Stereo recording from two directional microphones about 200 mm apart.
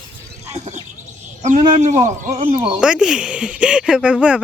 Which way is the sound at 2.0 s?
35° right (ahead or behind).